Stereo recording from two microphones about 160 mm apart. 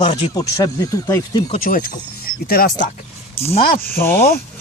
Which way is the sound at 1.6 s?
65° left (ahead or behind).